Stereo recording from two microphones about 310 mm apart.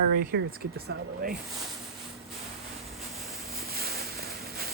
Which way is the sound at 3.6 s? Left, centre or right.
Right.